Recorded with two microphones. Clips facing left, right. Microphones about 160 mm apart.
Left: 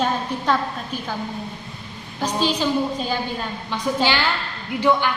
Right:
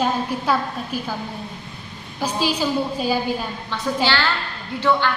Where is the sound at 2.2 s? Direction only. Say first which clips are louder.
Even; 10° right (ahead or behind).